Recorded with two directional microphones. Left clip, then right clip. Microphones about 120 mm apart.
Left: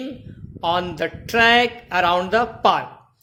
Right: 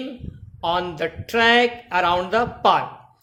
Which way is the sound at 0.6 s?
30° left (ahead or behind).